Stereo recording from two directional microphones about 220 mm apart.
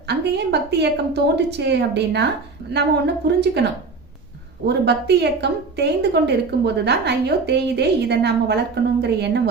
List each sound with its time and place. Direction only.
0.1 s speech: 50° right (ahead or behind)
3.2 s speech: 50° right (ahead or behind)